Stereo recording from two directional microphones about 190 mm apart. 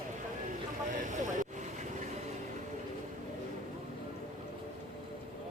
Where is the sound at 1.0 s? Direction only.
40° right (ahead or behind).